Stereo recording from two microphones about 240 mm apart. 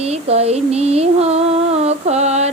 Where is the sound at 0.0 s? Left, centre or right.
Right.